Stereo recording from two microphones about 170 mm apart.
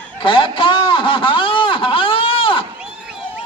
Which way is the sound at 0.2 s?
30° left (ahead or behind).